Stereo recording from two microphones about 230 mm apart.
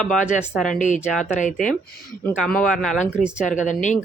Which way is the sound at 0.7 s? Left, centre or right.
Left.